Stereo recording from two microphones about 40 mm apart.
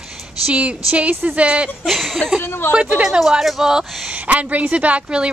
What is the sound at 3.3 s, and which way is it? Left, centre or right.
Speech, centre.